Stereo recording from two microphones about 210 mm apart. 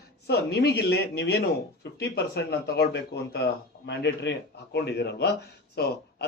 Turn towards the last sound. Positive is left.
turn(degrees=50)  # may be behind; listen again after turning